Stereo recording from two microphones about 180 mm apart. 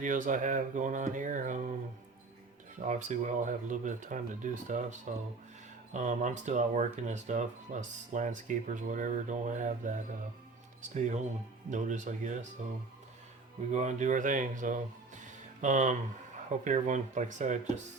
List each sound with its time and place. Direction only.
0.0 s speech: 45° right (ahead or behind)
2.8 s speech: 45° right (ahead or behind)
13.7 s speech: 40° right (ahead or behind)